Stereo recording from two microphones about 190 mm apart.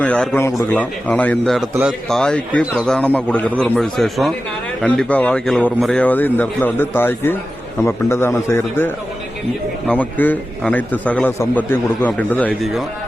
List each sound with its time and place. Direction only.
0.0 s a man's voice: 5° left (ahead or behind)